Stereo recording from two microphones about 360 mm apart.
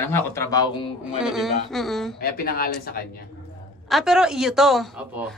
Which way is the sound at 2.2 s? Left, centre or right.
Left.